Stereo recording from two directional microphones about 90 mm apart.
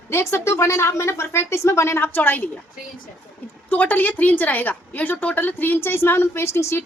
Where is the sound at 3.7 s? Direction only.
20° left (ahead or behind).